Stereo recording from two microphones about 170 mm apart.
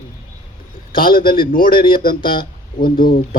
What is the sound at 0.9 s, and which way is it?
Speech, 60° left (ahead or behind).